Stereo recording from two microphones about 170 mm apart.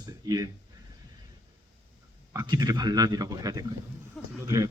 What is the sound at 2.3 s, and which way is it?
A man's voice, 20° right (ahead or behind).